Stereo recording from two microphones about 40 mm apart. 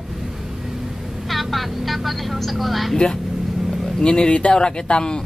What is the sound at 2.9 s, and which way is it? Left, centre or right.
Speech, centre.